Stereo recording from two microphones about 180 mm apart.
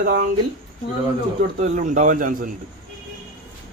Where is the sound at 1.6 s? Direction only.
45° right (ahead or behind).